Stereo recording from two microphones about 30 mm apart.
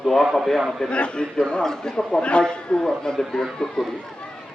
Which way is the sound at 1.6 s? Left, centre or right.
Left.